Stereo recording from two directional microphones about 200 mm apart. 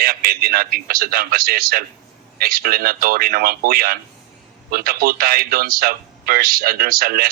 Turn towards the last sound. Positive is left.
turn(degrees=-50)  # may be behind; listen again after turning